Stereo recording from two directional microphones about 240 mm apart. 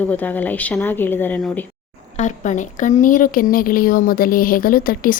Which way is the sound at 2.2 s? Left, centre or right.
Left.